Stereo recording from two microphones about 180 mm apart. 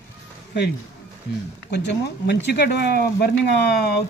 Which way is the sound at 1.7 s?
70° left (ahead or behind).